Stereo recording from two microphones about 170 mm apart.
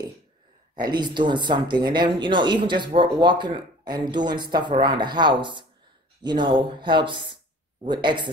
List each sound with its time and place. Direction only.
0.7 s speech: 25° right (ahead or behind)